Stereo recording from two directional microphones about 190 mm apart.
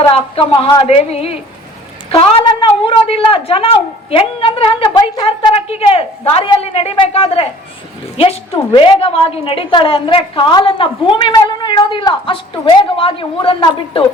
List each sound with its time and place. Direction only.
0.1 s a woman's voice: 30° left (ahead or behind)